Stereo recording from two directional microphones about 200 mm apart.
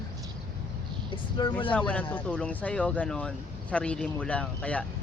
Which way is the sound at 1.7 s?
5° left (ahead or behind).